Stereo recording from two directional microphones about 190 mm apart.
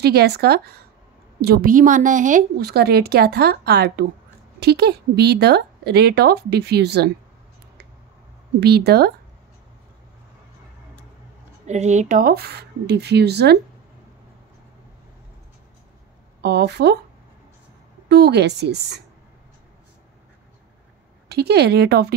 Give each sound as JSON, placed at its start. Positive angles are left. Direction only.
{"t": 0.0, "sound": "a woman's voice", "side_deg": -60}
{"t": 8.5, "sound": "a woman's voice", "side_deg": -60}
{"t": 11.6, "sound": "a woman's voice", "side_deg": -35}
{"t": 16.3, "sound": "a woman's voice", "side_deg": -60}
{"t": 18.0, "sound": "a woman's voice", "side_deg": -60}
{"t": 21.3, "sound": "a woman's voice", "side_deg": -60}